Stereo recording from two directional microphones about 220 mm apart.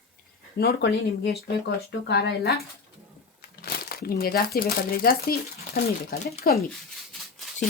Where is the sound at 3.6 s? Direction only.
45° left (ahead or behind).